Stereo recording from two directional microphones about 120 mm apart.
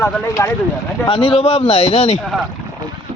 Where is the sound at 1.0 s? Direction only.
50° left (ahead or behind).